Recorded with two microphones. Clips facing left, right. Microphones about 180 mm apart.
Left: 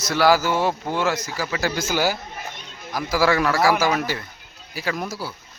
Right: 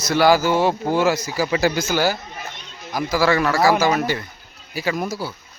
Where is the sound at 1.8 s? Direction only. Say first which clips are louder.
Right 2 dB; 10° left (ahead or behind).